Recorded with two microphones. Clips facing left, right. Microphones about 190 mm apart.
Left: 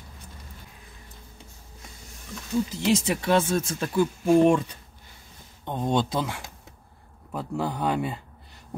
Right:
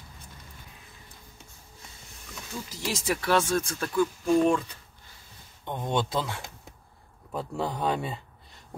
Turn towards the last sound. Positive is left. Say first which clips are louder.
# left 2 dB
turn(degrees=5)  # may be behind; listen again after turning